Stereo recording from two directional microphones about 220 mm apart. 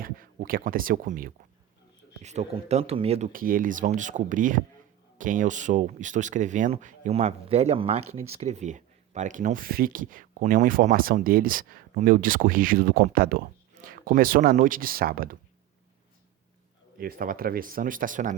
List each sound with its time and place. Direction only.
0.0 s speech: 40° right (ahead or behind)
3.3 s speech: 40° right (ahead or behind)
17.0 s speech: 40° right (ahead or behind)